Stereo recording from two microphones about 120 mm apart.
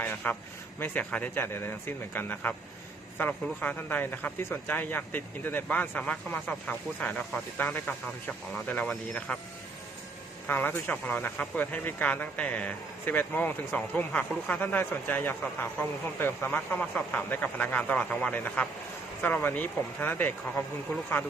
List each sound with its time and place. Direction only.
0.0 s a sound: 15° left (ahead or behind)
0.8 s speech: 15° left (ahead or behind)
10.4 s speech: 15° left (ahead or behind)